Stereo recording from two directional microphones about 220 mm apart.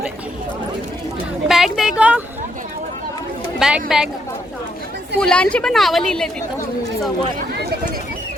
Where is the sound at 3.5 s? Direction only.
Centre (ahead or behind).